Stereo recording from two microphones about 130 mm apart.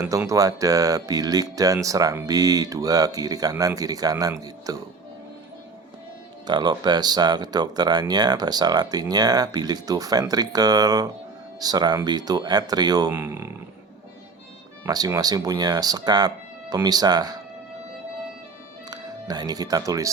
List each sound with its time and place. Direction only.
0.0 s speech: 25° right (ahead or behind)
6.5 s speech: 35° right (ahead or behind)
14.8 s speech: 30° right (ahead or behind)
18.9 s speech: 30° right (ahead or behind)